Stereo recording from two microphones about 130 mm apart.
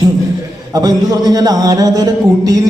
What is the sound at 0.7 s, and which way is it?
A man's voice, 30° right (ahead or behind).